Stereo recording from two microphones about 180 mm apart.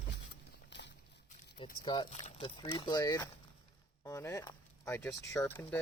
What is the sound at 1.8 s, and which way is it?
Speech, 25° left (ahead or behind).